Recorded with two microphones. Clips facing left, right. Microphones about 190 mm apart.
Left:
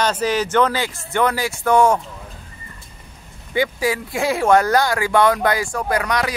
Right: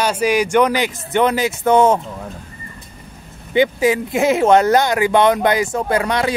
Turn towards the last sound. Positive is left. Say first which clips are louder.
# right 3 dB
turn(degrees=-25)  # may be behind; listen again after turning